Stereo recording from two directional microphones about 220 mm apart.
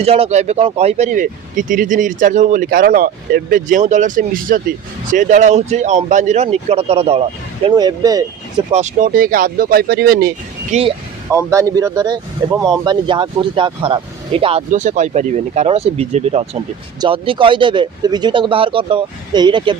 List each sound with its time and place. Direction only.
0.0 s speech: 30° right (ahead or behind)
8.7 s speech: 35° right (ahead or behind)
11.3 s speech: 15° right (ahead or behind)